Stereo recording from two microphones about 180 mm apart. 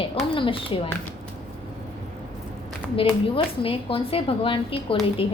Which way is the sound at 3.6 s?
30° left (ahead or behind).